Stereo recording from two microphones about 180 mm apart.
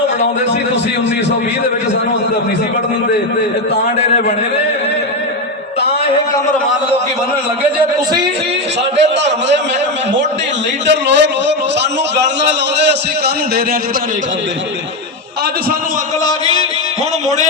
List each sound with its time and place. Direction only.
9.0 s a man's voice: 80° right
10.8 s a man's voice: 75° right (ahead or behind)
16.2 s music: 25° left (ahead or behind)